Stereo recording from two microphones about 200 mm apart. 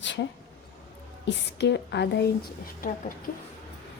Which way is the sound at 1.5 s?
60° left (ahead or behind).